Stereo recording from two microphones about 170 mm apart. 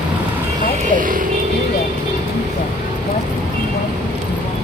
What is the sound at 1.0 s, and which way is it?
Speech, 55° right (ahead or behind).